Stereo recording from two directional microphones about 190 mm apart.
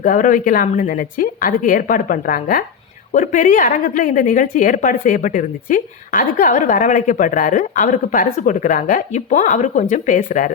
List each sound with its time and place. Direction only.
0.0 s a woman's voice: 45° left (ahead or behind)